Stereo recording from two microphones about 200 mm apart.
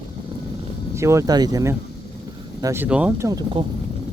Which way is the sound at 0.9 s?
15° right (ahead or behind).